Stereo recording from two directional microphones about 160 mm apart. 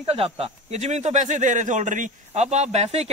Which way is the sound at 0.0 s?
40° right (ahead or behind).